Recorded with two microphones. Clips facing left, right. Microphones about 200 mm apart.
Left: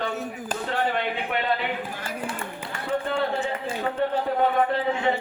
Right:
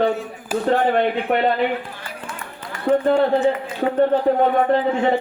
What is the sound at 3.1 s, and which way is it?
Speech, 50° right (ahead or behind).